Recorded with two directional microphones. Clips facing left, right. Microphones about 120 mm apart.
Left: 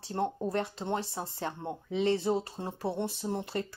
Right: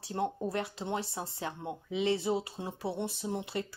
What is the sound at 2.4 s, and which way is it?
Speech, 45° left (ahead or behind).